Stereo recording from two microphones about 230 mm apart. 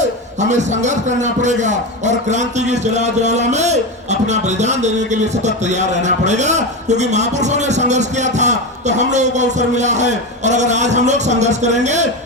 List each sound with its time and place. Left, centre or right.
0.3 s a man's voice: right